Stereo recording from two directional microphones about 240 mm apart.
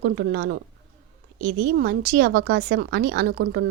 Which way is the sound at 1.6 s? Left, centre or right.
Right.